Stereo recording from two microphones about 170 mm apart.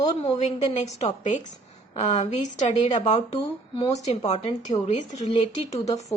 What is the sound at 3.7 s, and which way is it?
Speech, 20° left (ahead or behind).